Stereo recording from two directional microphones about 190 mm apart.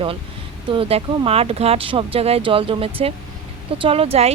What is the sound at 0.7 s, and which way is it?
Speech, 30° right (ahead or behind).